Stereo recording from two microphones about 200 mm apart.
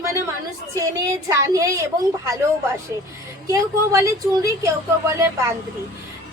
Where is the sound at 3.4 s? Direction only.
15° right (ahead or behind).